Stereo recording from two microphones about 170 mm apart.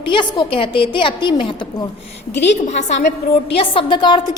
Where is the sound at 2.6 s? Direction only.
45° left (ahead or behind).